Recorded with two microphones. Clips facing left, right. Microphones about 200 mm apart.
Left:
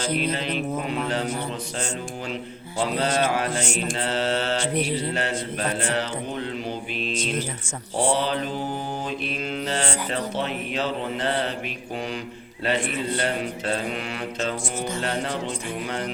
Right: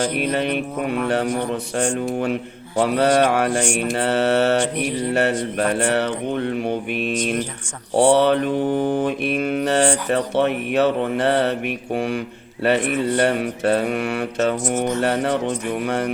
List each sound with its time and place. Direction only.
0.2 s mantra: 60° right (ahead or behind)
2.8 s mantra: 60° right (ahead or behind)
7.9 s mantra: 70° right (ahead or behind)
13.2 s mantra: 65° right (ahead or behind)